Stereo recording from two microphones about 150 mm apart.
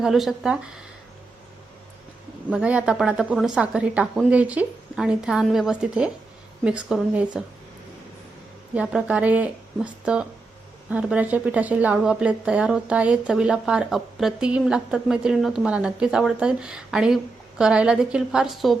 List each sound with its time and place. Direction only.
0.0 s a woman's voice: centre (ahead or behind)
2.5 s a woman's voice: 5° right (ahead or behind)
8.7 s a woman's voice: 10° right (ahead or behind)